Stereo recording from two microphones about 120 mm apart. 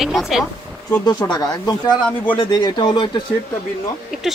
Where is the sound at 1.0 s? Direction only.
35° left (ahead or behind).